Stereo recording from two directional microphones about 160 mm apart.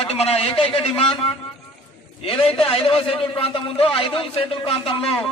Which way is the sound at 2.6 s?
35° left (ahead or behind).